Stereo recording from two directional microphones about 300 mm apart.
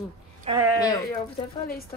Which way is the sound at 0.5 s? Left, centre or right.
Centre.